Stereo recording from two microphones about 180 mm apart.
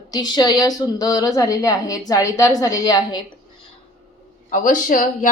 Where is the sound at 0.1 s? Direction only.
20° left (ahead or behind).